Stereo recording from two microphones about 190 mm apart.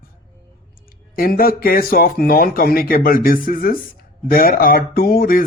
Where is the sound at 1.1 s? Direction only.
50° left (ahead or behind).